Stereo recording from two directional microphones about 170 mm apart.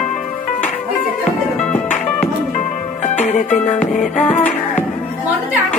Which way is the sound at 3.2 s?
40° left (ahead or behind).